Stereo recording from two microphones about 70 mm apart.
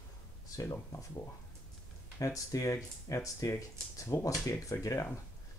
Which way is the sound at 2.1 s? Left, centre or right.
Left.